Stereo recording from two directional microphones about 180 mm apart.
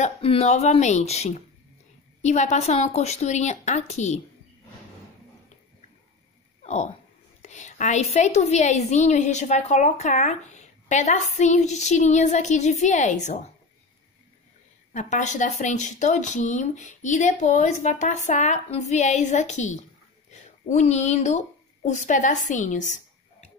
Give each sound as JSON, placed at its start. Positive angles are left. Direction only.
{"t": 0.0, "sound": "a woman's voice", "side_deg": 35}
{"t": 6.6, "sound": "a woman's voice", "side_deg": 40}
{"t": 14.9, "sound": "a woman's voice", "side_deg": 45}